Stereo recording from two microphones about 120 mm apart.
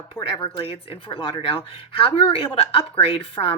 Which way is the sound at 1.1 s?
50° left (ahead or behind).